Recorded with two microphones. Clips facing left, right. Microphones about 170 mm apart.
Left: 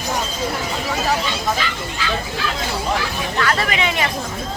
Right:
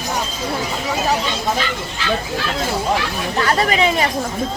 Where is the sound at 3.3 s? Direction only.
30° right (ahead or behind).